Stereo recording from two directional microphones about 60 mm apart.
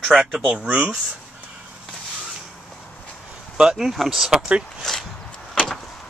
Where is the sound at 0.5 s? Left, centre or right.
Right.